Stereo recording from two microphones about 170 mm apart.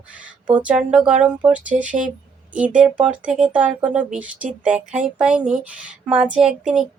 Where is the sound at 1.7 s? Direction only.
50° right (ahead or behind).